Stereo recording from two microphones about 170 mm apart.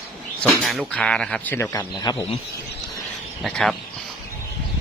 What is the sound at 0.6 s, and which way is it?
Speech, centre (ahead or behind).